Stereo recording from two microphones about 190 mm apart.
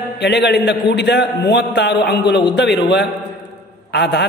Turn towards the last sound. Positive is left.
turn(degrees=65)  # may be behind; listen again after turning